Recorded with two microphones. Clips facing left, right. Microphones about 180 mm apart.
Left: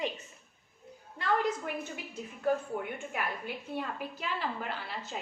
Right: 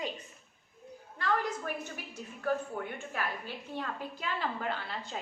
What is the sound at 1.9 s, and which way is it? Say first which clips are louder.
A woman's voice: left 2 dB; 20° left (ahead or behind).